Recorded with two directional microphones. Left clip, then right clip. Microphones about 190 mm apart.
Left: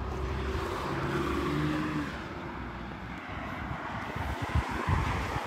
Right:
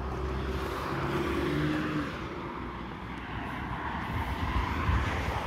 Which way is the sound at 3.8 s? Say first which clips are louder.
Right 3 dB; 45° left (ahead or behind).